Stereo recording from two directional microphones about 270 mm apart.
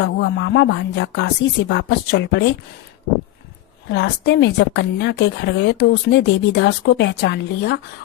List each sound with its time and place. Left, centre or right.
0.0 s a woman's voice: left
3.9 s a woman's voice: left